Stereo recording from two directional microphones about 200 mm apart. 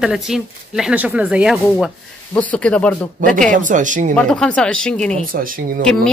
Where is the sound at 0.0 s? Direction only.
Centre (ahead or behind).